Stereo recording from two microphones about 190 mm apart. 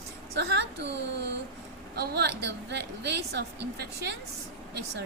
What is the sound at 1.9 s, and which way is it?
A woman's voice, 65° right (ahead or behind).